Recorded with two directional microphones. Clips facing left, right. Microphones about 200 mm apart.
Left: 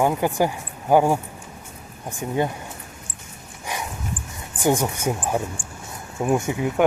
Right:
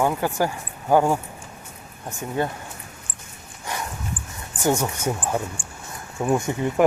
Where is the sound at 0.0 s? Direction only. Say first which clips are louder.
Left 2 dB; 15° left (ahead or behind).